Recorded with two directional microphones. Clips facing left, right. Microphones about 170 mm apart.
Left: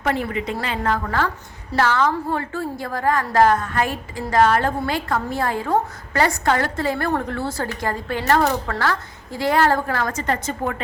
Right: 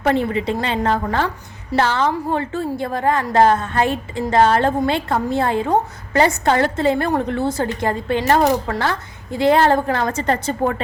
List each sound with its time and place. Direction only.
0.0 s a woman's voice: 30° right (ahead or behind)